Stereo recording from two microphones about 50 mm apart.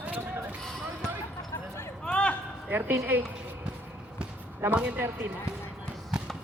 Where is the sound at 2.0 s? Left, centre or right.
Left.